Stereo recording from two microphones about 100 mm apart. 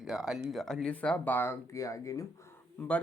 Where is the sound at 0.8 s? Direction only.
10° left (ahead or behind); by 2.2 s 35° left (ahead or behind).